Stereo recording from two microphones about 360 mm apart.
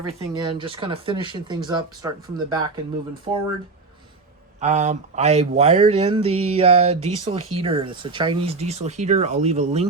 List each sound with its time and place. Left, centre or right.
0.1 s speech: centre
4.6 s speech: centre